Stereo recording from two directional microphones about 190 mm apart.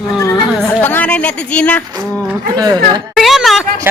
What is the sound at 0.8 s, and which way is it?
Speech, 10° left (ahead or behind).